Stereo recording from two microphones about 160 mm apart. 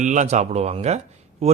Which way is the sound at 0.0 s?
50° right (ahead or behind).